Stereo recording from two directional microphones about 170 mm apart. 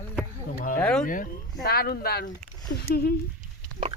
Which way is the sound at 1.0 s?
50° left (ahead or behind).